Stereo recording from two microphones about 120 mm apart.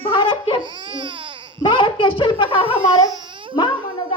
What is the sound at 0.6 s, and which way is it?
Baby cry, 40° right (ahead or behind).